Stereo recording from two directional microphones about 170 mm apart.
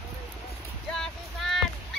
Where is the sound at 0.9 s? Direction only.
Centre (ahead or behind).